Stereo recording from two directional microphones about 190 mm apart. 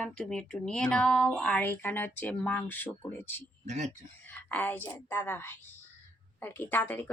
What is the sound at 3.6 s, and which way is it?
Speech, 35° right (ahead or behind).